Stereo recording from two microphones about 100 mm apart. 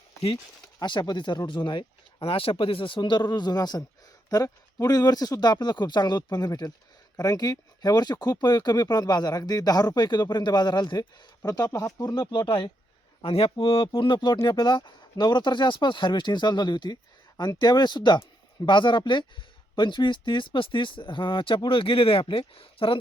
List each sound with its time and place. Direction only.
0.8 s speech: 50° left (ahead or behind)
13.2 s speech: 70° left (ahead or behind)